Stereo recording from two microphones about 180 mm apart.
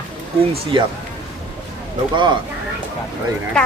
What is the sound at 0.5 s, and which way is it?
Speech, 25° right (ahead or behind).